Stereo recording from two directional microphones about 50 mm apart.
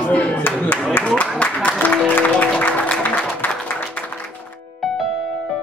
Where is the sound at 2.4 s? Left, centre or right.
Left.